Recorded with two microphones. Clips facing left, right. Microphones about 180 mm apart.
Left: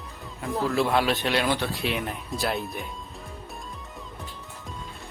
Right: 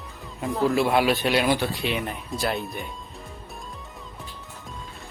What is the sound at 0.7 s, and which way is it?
Speech, 15° right (ahead or behind).